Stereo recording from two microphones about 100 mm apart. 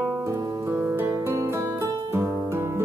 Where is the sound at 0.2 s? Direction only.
35° right (ahead or behind).